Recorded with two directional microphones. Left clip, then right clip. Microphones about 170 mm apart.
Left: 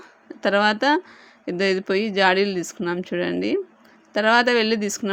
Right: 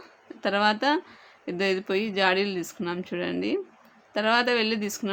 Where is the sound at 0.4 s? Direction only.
30° left (ahead or behind).